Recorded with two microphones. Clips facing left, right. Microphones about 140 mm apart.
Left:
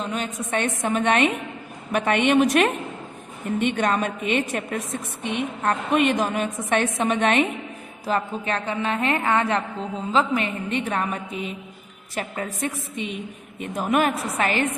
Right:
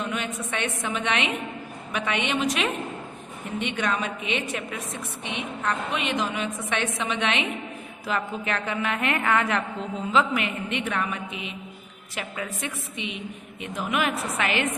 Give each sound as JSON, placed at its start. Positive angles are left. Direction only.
{"t": 0.0, "sound": "a woman's voice", "side_deg": 35}
{"t": 8.0, "sound": "a woman's voice", "side_deg": 35}